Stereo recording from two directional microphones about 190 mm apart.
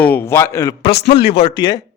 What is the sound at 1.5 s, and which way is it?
Speech, 20° left (ahead or behind).